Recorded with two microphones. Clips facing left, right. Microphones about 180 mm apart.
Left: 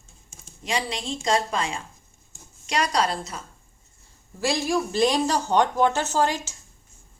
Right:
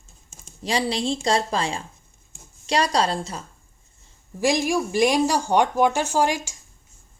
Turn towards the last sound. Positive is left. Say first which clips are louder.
# right 2 dB
turn(degrees=-15)  # may be behind; listen again after turning